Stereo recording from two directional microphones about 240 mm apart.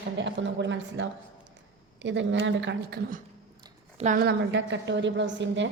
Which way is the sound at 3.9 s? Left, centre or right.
Right.